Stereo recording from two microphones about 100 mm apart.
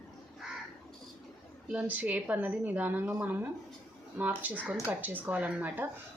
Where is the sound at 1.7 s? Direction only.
15° right (ahead or behind).